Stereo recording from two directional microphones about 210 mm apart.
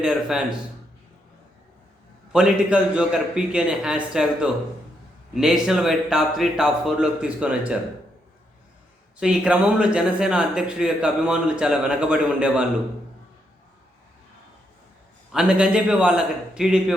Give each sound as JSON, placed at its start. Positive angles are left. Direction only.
{"t": 0.0, "sound": "speech", "side_deg": -5}
{"t": 2.3, "sound": "speech", "side_deg": -5}
{"t": 9.2, "sound": "speech", "side_deg": -5}
{"t": 15.3, "sound": "speech", "side_deg": -5}